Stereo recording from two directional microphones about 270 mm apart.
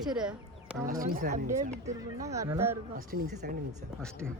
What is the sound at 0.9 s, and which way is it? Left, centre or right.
Speech, right.